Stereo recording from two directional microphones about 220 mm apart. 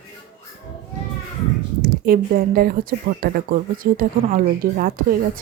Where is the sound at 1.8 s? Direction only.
40° right (ahead or behind).